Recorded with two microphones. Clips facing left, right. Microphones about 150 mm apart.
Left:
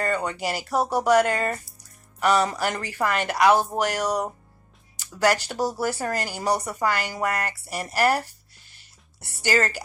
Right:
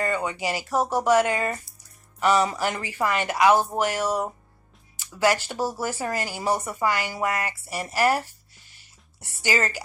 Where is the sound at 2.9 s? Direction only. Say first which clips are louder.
Even; 50° left (ahead or behind).